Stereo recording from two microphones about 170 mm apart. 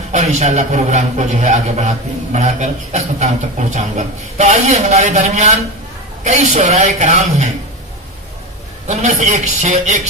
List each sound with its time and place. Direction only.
0.1 s a man's voice: 45° right (ahead or behind)
8.8 s a man's voice: 45° right (ahead or behind)